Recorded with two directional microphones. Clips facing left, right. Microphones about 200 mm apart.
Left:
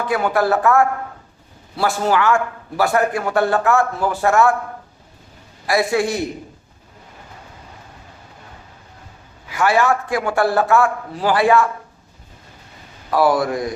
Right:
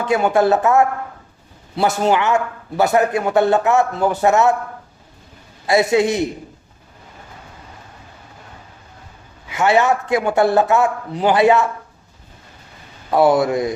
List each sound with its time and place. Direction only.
0.0 s a man's voice: 20° right (ahead or behind)
5.6 s a man's voice: 25° right (ahead or behind)
9.5 s a man's voice: 20° right (ahead or behind)
13.1 s a man's voice: 25° right (ahead or behind)